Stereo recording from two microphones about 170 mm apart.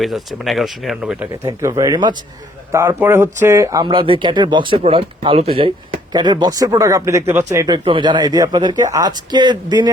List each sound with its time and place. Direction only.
0.0 s speech: centre (ahead or behind)
1.5 s speech: 20° right (ahead or behind)
3.8 s speech: 30° right (ahead or behind)
7.9 s speech: 30° right (ahead or behind)